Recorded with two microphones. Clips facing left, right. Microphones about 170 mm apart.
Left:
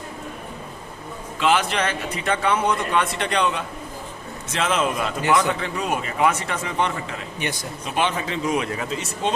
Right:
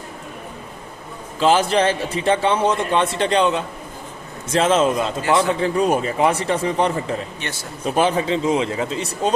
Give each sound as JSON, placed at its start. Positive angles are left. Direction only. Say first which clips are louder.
{"t": 1.4, "sound": "a man's voice", "louder": "right 5 dB", "side_deg": -30}